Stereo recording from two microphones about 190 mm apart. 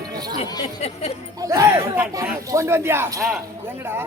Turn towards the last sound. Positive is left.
turn(degrees=-10)  # may be behind; listen again after turning